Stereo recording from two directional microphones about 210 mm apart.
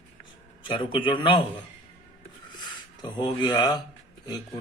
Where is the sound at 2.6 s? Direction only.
20° left (ahead or behind).